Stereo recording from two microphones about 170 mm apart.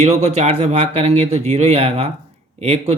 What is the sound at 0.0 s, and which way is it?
Speech, 40° right (ahead or behind).